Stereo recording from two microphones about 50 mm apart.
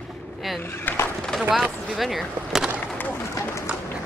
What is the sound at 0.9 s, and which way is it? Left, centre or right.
Speech, left.